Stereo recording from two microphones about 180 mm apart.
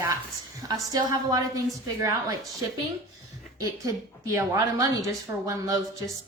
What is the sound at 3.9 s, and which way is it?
A woman's voice, 20° right (ahead or behind).